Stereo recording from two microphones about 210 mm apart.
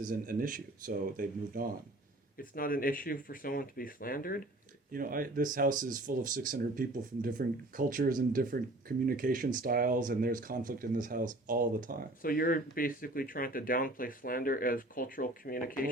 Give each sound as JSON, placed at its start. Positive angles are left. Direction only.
{"t": 0.0, "sound": "speech", "side_deg": -40}
{"t": 2.4, "sound": "speech", "side_deg": 45}
{"t": 4.9, "sound": "speech", "side_deg": -40}
{"t": 12.2, "sound": "speech", "side_deg": 45}